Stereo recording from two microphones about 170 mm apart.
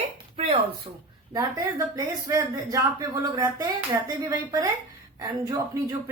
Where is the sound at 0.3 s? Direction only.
35° right (ahead or behind).